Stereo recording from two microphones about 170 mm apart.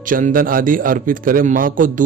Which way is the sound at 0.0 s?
50° right (ahead or behind).